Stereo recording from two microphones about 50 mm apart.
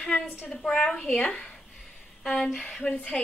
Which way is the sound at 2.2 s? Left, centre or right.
Centre.